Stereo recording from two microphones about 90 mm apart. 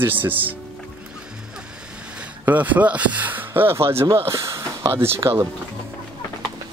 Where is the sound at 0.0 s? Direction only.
20° right (ahead or behind).